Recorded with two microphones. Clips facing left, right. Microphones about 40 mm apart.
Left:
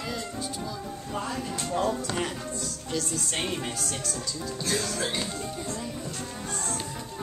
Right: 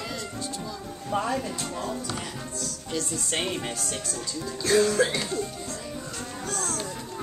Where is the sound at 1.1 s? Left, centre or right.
Right.